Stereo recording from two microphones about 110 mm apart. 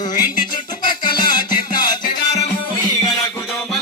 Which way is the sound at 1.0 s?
40° left (ahead or behind).